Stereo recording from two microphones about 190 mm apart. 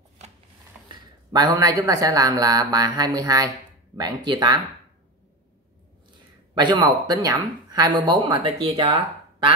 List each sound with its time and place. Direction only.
0.8 s speech: 20° right (ahead or behind)
6.6 s speech: 25° right (ahead or behind)